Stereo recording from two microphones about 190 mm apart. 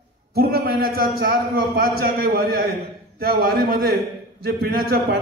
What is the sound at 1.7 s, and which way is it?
Speech, 50° right (ahead or behind).